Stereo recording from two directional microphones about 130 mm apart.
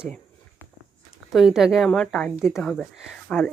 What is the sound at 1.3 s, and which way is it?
Speech, 5° right (ahead or behind).